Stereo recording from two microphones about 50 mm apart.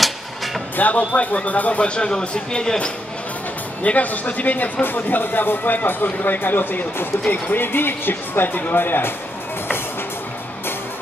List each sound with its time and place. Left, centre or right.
0.7 s speech: left; by 2.9 s centre
3.8 s a man's voice: left